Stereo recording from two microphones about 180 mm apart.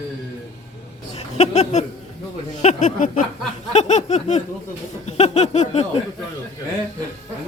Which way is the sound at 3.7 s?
40° left (ahead or behind).